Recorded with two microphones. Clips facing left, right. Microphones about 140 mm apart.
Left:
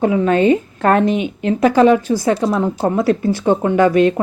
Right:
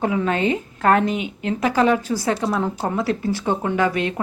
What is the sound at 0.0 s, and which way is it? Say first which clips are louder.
A woman's voice: left 7 dB; 30° left (ahead or behind).